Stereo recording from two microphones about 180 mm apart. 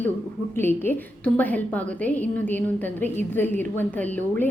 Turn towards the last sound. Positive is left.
turn(degrees=10)  # may be behind; listen again after turning